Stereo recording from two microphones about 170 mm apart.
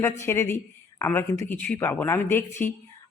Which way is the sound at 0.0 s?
15° left (ahead or behind).